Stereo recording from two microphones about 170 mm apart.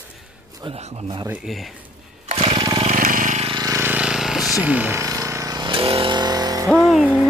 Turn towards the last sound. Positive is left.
turn(degrees=0)  # may be behind; listen again after turning